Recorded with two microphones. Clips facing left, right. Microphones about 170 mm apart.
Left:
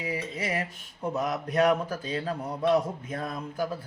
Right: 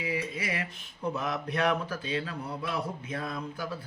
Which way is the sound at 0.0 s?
40° left (ahead or behind).